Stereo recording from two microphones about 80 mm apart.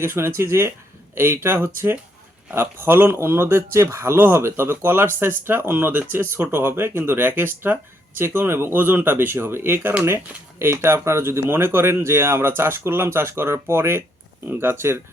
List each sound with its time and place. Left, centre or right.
0.0 s speech: right